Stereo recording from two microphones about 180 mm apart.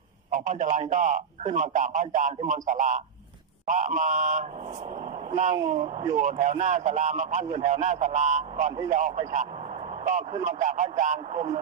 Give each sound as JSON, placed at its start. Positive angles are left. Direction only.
{"t": 0.3, "sound": "a man's voice", "side_deg": -45}
{"t": 6.1, "sound": "a man's voice", "side_deg": -40}